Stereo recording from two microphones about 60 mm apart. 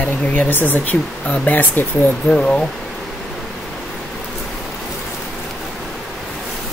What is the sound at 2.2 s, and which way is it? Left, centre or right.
Speech, centre.